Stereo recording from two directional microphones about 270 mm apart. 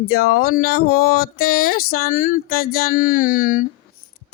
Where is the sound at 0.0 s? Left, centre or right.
Left.